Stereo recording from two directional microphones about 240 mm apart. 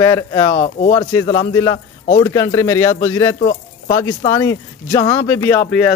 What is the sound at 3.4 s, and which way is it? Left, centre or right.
Speech, left.